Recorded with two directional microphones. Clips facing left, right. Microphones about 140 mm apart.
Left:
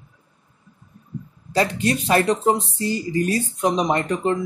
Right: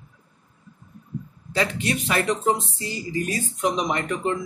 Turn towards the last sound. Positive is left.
turn(degrees=35)  # may be behind; listen again after turning